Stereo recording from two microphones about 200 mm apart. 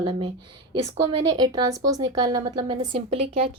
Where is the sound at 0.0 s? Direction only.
25° right (ahead or behind).